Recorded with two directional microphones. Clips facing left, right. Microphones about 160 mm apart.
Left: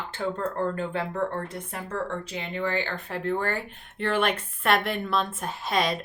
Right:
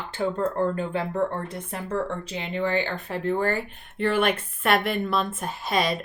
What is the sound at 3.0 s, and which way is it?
A woman's voice, 10° right (ahead or behind).